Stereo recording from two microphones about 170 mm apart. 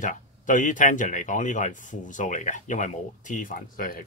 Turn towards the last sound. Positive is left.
turn(degrees=55)  # may be behind; listen again after turning